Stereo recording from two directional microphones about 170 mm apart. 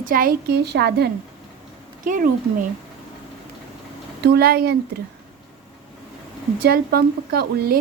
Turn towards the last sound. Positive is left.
turn(degrees=-65)  # may be behind; listen again after turning